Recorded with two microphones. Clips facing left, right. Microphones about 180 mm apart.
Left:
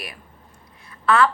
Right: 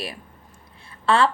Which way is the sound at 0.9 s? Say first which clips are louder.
Left 1 dB; 30° right (ahead or behind).